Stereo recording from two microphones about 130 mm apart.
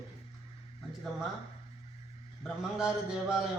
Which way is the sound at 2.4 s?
5° right (ahead or behind).